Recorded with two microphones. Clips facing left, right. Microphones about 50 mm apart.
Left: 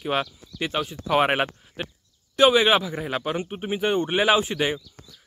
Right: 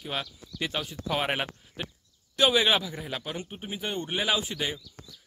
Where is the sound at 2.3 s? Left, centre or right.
Left.